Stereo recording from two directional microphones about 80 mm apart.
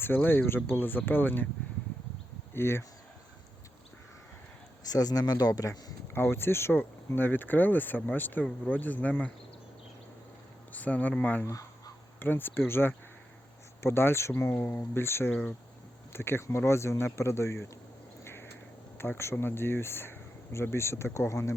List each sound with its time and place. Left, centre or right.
0.0 s speech: left
2.5 s speech: left
4.9 s speech: left
6.1 s speech: left
10.7 s a sound: centre
11.1 s speech: centre; by 17.7 s left
18.2 s a sound: left
18.9 s speech: left